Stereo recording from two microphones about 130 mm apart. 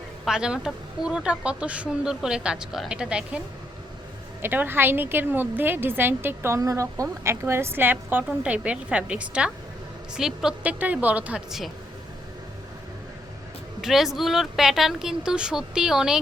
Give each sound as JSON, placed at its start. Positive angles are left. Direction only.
{"t": 0.3, "sound": "a woman's voice", "side_deg": -5}
{"t": 4.4, "sound": "a woman's voice", "side_deg": -15}
{"t": 13.8, "sound": "a woman's voice", "side_deg": 0}